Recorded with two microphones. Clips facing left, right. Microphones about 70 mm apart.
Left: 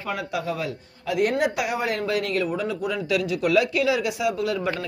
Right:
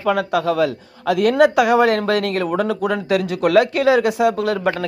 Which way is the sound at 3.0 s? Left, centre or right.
Right.